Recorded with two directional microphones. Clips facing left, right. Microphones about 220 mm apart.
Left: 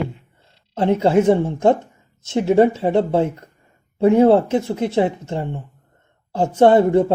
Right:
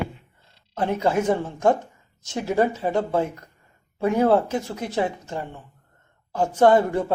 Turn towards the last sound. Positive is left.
turn(degrees=25)  # may be behind; listen again after turning